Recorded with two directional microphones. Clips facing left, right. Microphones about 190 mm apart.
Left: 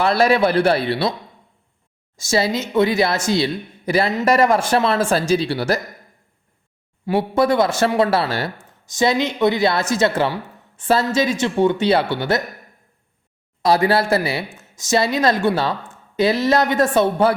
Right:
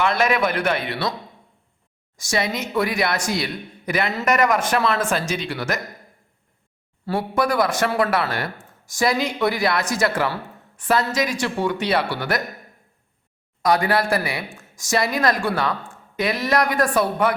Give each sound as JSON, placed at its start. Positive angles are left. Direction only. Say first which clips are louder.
{"t": 0.0, "sound": "speech", "louder": "left 4 dB", "side_deg": 35}
{"t": 2.1, "sound": "speech", "louder": "left 5 dB", "side_deg": 25}
{"t": 7.0, "sound": "speech", "louder": "left 4 dB", "side_deg": 20}
{"t": 13.6, "sound": "speech", "louder": "left 3 dB", "side_deg": 30}